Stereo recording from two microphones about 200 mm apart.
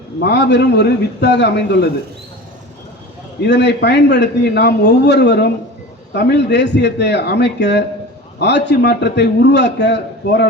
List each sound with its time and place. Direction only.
0.2 s a man's voice: 55° left (ahead or behind)
3.4 s a man's voice: 60° left (ahead or behind)